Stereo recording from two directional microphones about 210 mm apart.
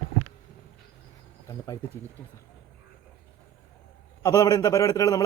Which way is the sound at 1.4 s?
15° left (ahead or behind).